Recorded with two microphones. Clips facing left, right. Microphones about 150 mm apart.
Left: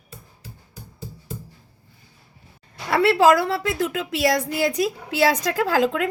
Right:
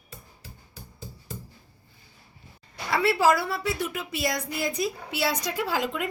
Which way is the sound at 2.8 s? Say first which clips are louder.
Left 6 dB; 65° left (ahead or behind).